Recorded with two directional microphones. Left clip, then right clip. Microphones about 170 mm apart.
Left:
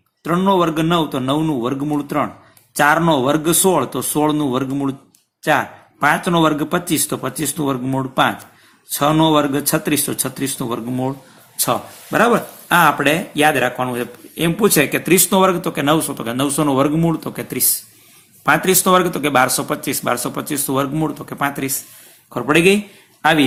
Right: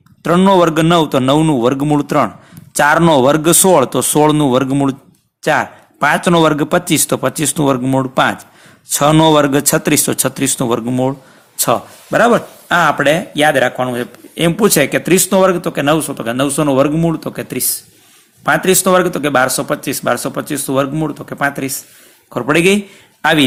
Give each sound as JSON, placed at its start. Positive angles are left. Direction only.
{"t": 0.2, "sound": "speech", "side_deg": -45}